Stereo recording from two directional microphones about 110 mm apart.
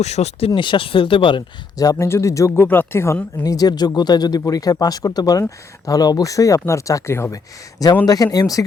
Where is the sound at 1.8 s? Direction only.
30° left (ahead or behind).